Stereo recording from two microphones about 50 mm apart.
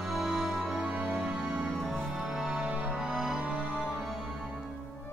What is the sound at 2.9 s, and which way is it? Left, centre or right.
Music, centre.